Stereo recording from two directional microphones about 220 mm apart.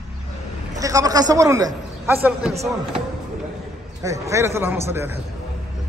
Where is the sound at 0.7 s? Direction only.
15° right (ahead or behind).